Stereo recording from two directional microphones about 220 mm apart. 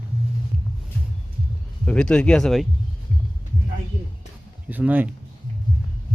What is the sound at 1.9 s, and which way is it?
Speech, 5° left (ahead or behind).